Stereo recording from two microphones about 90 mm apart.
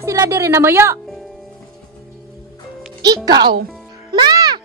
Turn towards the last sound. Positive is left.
turn(degrees=-50)  # may be behind; listen again after turning